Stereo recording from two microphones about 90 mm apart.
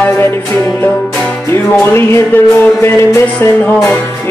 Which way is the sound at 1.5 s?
25° left (ahead or behind).